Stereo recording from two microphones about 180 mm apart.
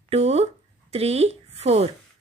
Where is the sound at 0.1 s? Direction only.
35° right (ahead or behind).